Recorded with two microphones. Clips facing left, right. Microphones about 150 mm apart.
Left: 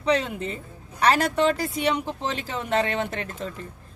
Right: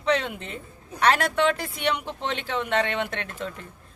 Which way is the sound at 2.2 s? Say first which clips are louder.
Right 1 dB; 40° left (ahead or behind).